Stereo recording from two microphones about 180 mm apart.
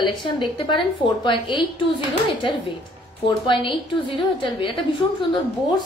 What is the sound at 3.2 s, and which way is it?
A woman's voice, 25° left (ahead or behind).